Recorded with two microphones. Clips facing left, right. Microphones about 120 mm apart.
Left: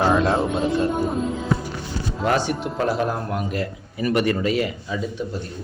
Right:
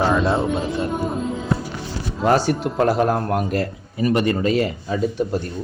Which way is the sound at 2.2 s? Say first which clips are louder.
Right 4 dB; 35° right (ahead or behind).